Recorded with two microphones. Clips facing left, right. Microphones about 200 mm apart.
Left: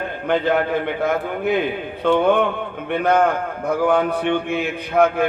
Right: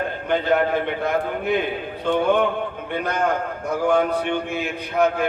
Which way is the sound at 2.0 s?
60° left (ahead or behind).